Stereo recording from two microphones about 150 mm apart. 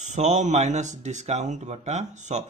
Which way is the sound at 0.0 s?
50° right (ahead or behind).